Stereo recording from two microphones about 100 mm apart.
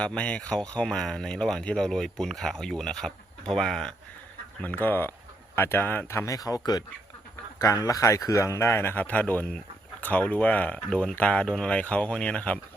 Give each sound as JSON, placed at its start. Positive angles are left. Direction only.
{"t": 0.0, "sound": "speech", "side_deg": 10}
{"t": 4.6, "sound": "speech", "side_deg": 20}
{"t": 7.6, "sound": "speech", "side_deg": 35}